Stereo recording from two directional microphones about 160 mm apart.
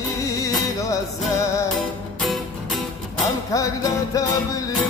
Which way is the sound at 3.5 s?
20° left (ahead or behind).